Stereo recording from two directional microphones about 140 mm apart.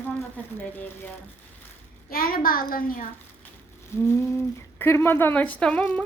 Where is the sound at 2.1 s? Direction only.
90° left.